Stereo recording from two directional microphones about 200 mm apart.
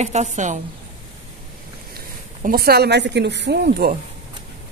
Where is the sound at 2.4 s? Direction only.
45° right (ahead or behind).